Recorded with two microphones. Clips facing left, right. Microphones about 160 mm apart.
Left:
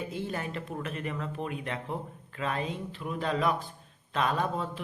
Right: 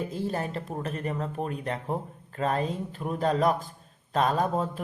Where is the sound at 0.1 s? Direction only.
35° right (ahead or behind).